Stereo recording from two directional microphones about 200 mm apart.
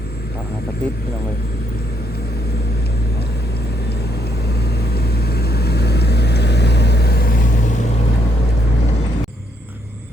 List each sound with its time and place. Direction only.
4.6 s vehicle: 55° left (ahead or behind)